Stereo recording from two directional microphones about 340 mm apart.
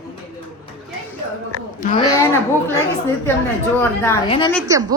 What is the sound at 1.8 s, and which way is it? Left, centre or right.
Speech, left.